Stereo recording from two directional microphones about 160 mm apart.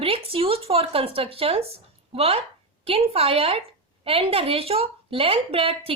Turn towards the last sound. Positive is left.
turn(degrees=-35)  # may be behind; listen again after turning